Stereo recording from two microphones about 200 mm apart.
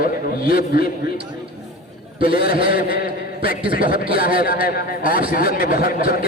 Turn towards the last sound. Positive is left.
turn(degrees=50)  # may be behind; listen again after turning